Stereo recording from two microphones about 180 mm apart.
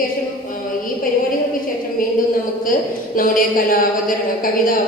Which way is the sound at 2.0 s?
50° left (ahead or behind).